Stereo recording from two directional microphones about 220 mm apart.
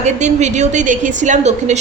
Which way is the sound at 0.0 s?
30° right (ahead or behind).